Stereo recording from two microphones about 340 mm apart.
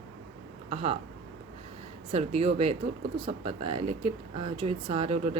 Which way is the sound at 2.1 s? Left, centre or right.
Centre.